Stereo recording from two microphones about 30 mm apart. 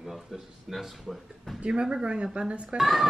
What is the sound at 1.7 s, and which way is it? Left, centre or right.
Speech, right.